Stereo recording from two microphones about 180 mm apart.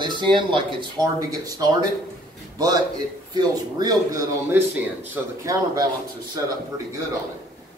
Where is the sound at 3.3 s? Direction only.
20° right (ahead or behind).